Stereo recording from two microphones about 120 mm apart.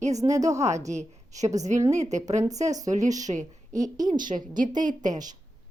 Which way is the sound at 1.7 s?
30° right (ahead or behind).